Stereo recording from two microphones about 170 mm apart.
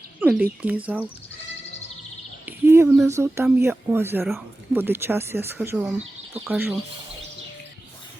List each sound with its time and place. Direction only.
0.2 s speech: 5° right (ahead or behind)
2.5 s bird: 15° right (ahead or behind)
3.1 s speech: 15° right (ahead or behind)